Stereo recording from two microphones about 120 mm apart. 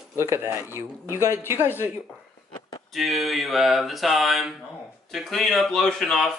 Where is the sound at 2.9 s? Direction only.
Centre (ahead or behind).